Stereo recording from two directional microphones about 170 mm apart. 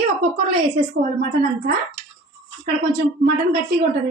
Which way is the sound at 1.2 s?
60° right (ahead or behind).